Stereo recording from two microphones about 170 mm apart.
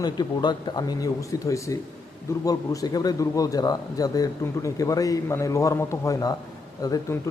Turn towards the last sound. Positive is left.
turn(degrees=20)  # may be behind; listen again after turning